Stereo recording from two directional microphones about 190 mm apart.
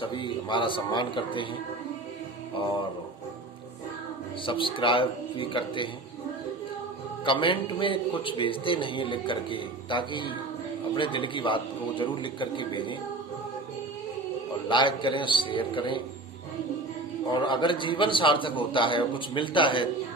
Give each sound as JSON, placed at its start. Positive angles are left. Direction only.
{"t": 0.0, "sound": "a man's voice", "side_deg": 25}
{"t": 4.4, "sound": "a man's voice", "side_deg": 25}
{"t": 7.3, "sound": "a man's voice", "side_deg": 25}
{"t": 14.7, "sound": "a man's voice", "side_deg": 25}
{"t": 17.3, "sound": "a man's voice", "side_deg": 25}